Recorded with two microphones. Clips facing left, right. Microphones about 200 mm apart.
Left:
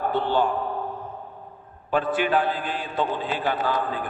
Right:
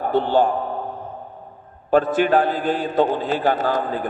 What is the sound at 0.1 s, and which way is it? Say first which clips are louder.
Speech: right 8 dB; 40° right (ahead or behind).